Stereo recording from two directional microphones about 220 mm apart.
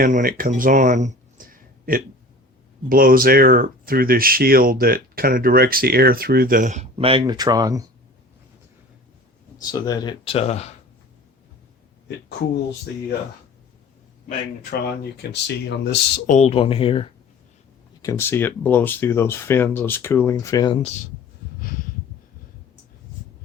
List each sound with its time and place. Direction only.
0.0 s speech: 40° right (ahead or behind); by 7.9 s 15° right (ahead or behind)
9.7 s speech: 20° left (ahead or behind)
15.2 s speech: 50° left (ahead or behind); by 17.1 s 25° left (ahead or behind)
18.0 s speech: 15° left (ahead or behind)
21.6 s a sound: 40° left (ahead or behind)